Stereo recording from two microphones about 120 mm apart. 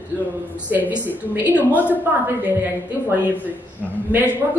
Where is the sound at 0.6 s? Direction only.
15° right (ahead or behind).